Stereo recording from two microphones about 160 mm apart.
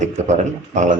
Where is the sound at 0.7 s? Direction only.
50° right (ahead or behind).